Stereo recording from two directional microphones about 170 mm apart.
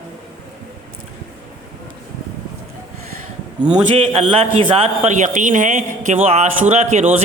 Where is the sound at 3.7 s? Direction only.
30° right (ahead or behind).